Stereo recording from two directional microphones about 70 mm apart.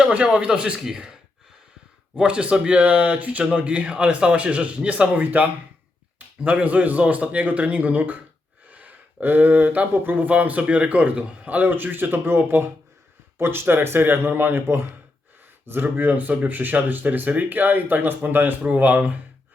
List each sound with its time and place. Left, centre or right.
0.1 s speech: centre
2.1 s speech: centre